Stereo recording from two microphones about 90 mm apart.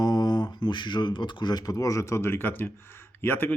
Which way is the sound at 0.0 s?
50° left (ahead or behind).